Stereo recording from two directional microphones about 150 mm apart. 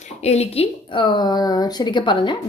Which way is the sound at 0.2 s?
45° left (ahead or behind).